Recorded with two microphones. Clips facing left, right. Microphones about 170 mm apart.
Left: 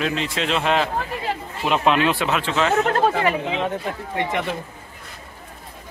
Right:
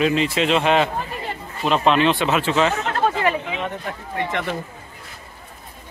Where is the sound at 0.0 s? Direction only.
5° right (ahead or behind).